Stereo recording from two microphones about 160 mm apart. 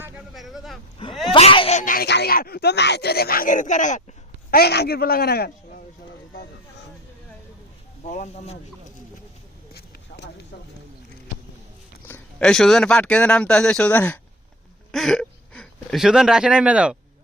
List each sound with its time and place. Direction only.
0.3 s vehicle: centre (ahead or behind)
1.3 s a sound: 35° left (ahead or behind)
1.8 s speech: 65° left (ahead or behind)
4.5 s a man's voice: 85° left
8.0 s speech: 50° left (ahead or behind)
10.5 s speech: 90° left
12.0 s speech: 10° left (ahead or behind); by 17.0 s 5° right (ahead or behind)